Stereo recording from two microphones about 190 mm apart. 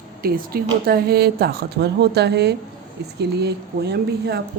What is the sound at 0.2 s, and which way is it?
Speech, 55° right (ahead or behind).